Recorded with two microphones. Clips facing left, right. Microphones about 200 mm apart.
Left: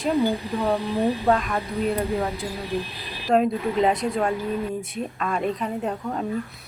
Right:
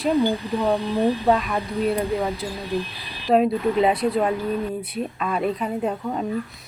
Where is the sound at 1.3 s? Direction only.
5° right (ahead or behind).